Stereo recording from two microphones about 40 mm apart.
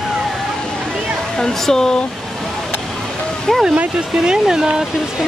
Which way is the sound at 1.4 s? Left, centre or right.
Centre.